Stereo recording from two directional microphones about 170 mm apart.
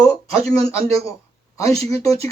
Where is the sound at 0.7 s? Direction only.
35° right (ahead or behind).